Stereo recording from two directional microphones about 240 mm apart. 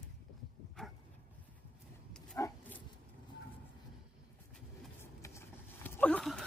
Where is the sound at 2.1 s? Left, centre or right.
Centre.